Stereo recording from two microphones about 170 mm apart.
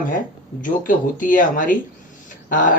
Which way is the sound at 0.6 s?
50° left (ahead or behind).